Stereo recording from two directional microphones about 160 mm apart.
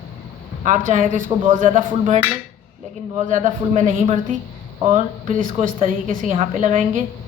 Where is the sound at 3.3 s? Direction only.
50° right (ahead or behind).